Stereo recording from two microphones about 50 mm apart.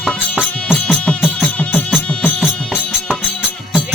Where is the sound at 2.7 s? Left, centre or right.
Centre.